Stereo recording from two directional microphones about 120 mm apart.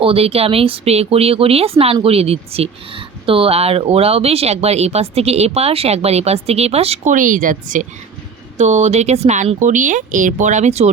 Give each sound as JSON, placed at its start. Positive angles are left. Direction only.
{"t": 0.0, "sound": "speech", "side_deg": -55}
{"t": 8.5, "sound": "speech", "side_deg": -70}